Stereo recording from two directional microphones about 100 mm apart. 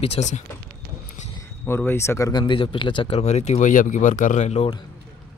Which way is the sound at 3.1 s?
90° left.